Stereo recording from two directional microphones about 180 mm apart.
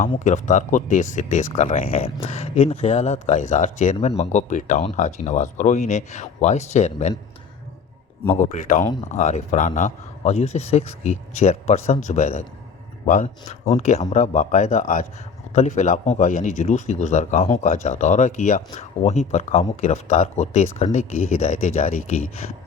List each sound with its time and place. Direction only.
0.3 s speech: 45° left (ahead or behind)
8.4 s speech: 45° left (ahead or behind)